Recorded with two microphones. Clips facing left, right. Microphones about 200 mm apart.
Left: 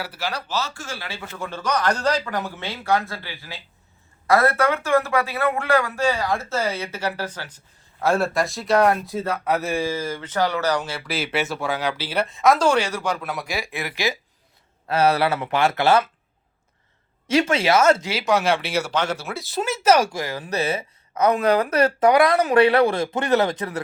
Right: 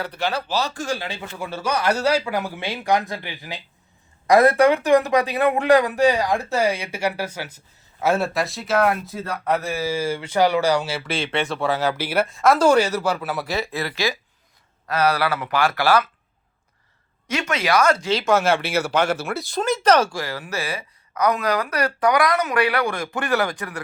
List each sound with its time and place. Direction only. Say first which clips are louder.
0.0 s speech: right 4 dB; 5° left (ahead or behind)
0.5 s speech: right 4 dB; 15° right (ahead or behind); by 11.8 s centre (ahead or behind)
11.9 s speech: right 3 dB; 10° right (ahead or behind)
13.5 s a woman's voice: right 3 dB; 15° left (ahead or behind)
17.2 s a woman's voice: left 4 dB; 30° left (ahead or behind)
18.1 s speech: right 2 dB; 5° left (ahead or behind)
20.1 s a woman's voice: left 1 dB; 20° left (ahead or behind)